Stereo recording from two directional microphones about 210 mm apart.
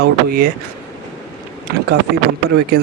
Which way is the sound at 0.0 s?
45° right (ahead or behind).